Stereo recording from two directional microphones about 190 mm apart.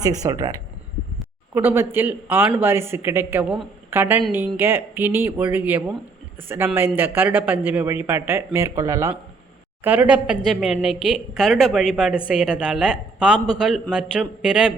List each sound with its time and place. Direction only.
0.0 s a man's voice: 20° right (ahead or behind)